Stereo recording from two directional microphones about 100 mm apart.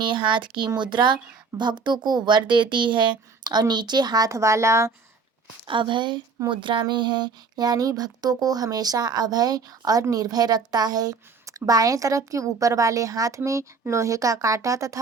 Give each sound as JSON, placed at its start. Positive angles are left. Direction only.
{"t": 0.0, "sound": "speech", "side_deg": -55}
{"t": 5.6, "sound": "speech", "side_deg": -55}